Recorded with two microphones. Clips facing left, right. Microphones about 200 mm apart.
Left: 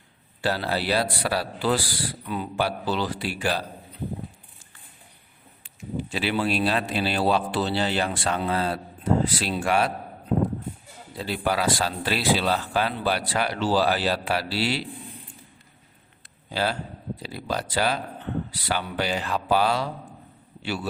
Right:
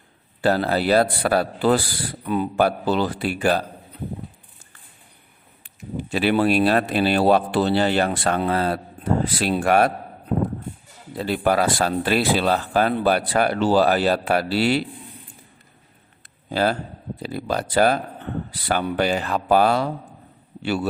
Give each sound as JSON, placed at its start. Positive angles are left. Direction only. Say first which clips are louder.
{"t": 0.4, "sound": "speech", "louder": "right 6 dB", "side_deg": -50}
{"t": 6.0, "sound": "speech", "louder": "right 7 dB", "side_deg": -55}
{"t": 11.2, "sound": "speech", "louder": "right 6 dB", "side_deg": -50}
{"t": 16.5, "sound": "a man's voice", "louder": "right 5 dB", "side_deg": -50}